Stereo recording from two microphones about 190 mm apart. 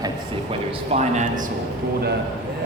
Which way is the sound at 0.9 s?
40° right (ahead or behind).